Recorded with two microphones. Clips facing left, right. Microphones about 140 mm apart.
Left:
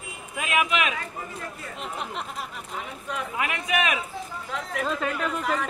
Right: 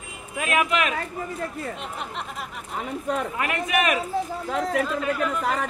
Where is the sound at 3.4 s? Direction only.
45° right (ahead or behind).